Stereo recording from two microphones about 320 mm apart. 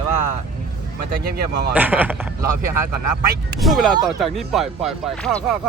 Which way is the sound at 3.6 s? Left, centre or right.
Centre.